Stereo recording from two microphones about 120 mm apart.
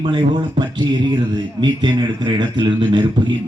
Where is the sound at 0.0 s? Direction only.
40° right (ahead or behind).